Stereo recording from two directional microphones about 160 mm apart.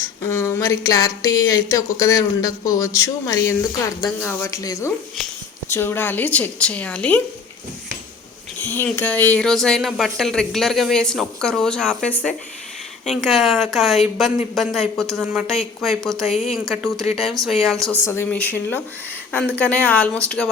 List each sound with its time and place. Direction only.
0.0 s a woman's voice: 15° left (ahead or behind)
8.6 s speech: 15° left (ahead or behind)
17.9 s a woman's voice: 15° left (ahead or behind)